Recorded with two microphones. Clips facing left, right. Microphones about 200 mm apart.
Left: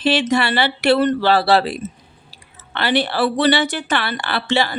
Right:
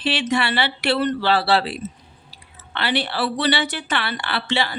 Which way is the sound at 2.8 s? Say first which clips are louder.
Left 5 dB; 45° left (ahead or behind).